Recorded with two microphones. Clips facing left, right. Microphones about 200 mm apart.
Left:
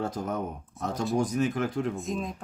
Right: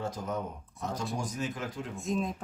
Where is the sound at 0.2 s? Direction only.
70° left (ahead or behind).